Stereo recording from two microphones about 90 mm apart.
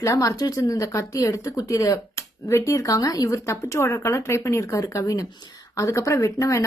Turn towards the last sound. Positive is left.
turn(degrees=35)  # may be behind; listen again after turning